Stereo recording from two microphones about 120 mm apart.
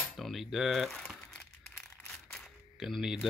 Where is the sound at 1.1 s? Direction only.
10° left (ahead or behind).